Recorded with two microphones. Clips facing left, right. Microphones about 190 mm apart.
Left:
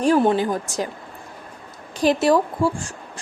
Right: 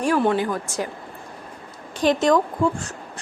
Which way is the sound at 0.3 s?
25° left (ahead or behind).